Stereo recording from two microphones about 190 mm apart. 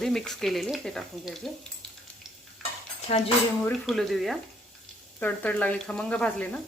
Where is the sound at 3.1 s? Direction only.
35° left (ahead or behind).